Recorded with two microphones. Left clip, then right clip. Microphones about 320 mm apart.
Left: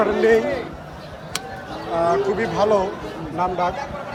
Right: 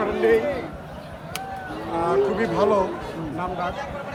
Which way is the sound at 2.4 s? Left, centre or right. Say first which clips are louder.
Left 2 dB; centre.